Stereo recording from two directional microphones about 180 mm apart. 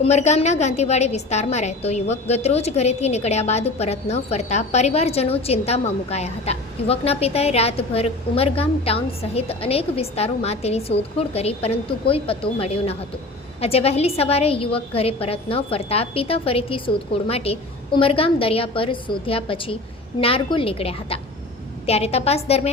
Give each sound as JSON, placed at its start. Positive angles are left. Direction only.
{"t": 0.0, "sound": "a woman's voice", "side_deg": 40}